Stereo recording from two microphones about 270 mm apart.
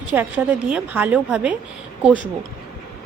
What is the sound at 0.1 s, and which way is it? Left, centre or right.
Speech, centre.